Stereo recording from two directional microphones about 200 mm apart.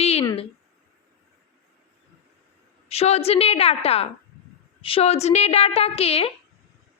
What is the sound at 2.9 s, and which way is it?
A woman's voice, 30° left (ahead or behind).